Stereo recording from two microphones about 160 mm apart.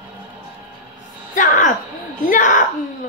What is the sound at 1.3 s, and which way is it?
Speech, 55° left (ahead or behind).